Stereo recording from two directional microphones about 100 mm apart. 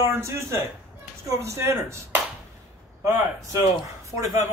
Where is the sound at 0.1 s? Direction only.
25° right (ahead or behind).